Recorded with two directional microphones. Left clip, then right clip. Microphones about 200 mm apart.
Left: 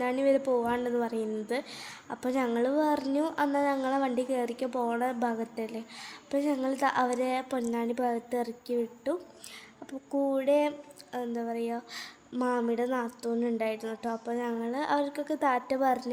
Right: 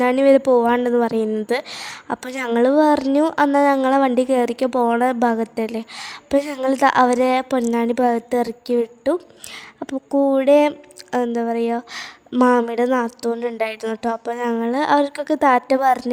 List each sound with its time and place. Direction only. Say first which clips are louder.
0.0 s a woman's voice: right 12 dB; 50° right (ahead or behind)